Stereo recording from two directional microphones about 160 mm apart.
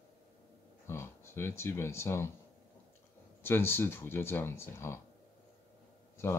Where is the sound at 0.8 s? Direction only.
15° left (ahead or behind).